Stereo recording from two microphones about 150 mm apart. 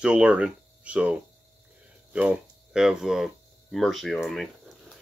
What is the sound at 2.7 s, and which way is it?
Speech, 5° right (ahead or behind).